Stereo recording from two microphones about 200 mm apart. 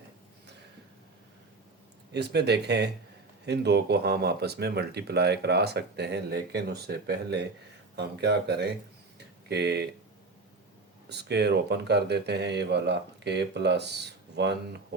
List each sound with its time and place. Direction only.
2.1 s speech: 55° right (ahead or behind)
9.1 s a sound: 55° right (ahead or behind)
11.1 s speech: 55° right (ahead or behind)